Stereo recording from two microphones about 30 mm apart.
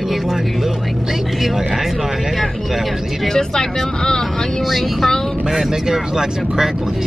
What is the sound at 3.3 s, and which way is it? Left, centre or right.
Speech, left.